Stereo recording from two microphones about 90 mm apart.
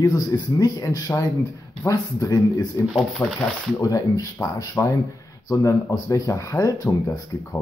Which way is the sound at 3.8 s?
40° left (ahead or behind).